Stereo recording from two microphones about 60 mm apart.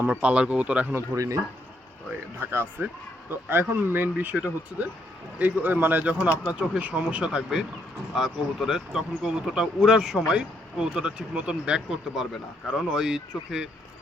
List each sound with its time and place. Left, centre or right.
0.0 s speech: right
1.1 s speech: right
2.4 s speech: right
6.1 s speech: right
8.1 s speech: centre